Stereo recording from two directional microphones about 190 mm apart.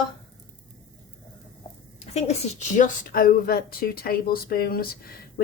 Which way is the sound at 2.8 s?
45° left (ahead or behind).